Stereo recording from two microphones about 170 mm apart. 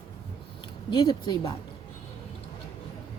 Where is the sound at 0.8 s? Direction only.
25° left (ahead or behind).